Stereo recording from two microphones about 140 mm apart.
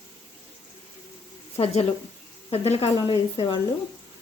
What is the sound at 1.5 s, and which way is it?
Speech, 45° left (ahead or behind).